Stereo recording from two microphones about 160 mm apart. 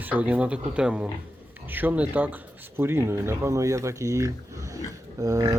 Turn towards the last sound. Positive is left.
turn(degrees=-20)  # may be behind; listen again after turning